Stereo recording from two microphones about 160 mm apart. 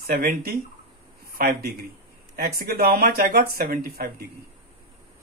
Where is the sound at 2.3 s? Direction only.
70° right (ahead or behind).